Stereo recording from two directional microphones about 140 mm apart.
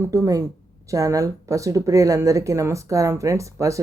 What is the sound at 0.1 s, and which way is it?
Speech, 25° right (ahead or behind).